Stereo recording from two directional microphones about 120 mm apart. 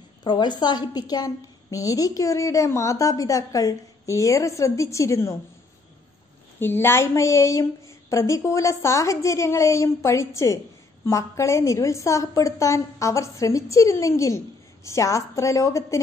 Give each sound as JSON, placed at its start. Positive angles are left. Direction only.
{"t": 0.2, "sound": "a woman's voice", "side_deg": 40}
{"t": 6.6, "sound": "a woman's voice", "side_deg": 20}